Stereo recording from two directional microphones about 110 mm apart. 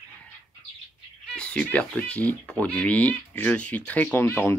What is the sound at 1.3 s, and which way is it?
Speech, 10° left (ahead or behind).